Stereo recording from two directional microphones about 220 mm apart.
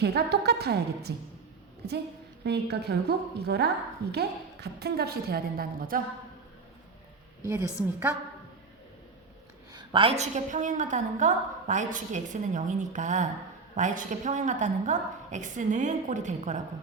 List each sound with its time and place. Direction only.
0.0 s a woman's voice: 45° right (ahead or behind)
7.4 s a woman's voice: 15° right (ahead or behind)
9.7 s a woman's voice: 25° right (ahead or behind)